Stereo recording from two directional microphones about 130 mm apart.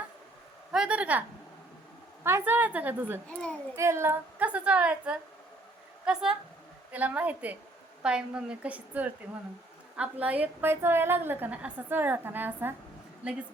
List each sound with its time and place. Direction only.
0.7 s a woman's voice: 5° right (ahead or behind)
2.2 s a woman's voice: 15° right (ahead or behind)
3.2 s a child's voice: 10° left (ahead or behind)
3.8 s a woman's voice: 20° right (ahead or behind)